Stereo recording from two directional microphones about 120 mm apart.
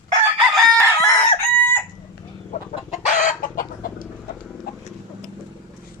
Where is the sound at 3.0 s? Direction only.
90° left.